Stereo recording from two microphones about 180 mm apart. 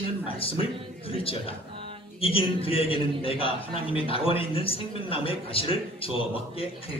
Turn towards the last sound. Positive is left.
turn(degrees=30)  # may be behind; listen again after turning